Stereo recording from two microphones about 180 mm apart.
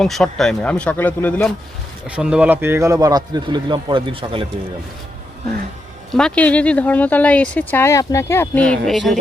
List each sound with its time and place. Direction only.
0.0 s speech: centre (ahead or behind)
2.0 s speech: 5° right (ahead or behind); by 4.4 s 30° right (ahead or behind)
6.1 s speech: 5° left (ahead or behind)